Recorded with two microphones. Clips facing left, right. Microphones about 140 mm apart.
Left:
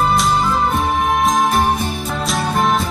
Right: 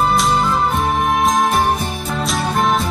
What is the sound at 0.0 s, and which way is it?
Music, centre (ahead or behind).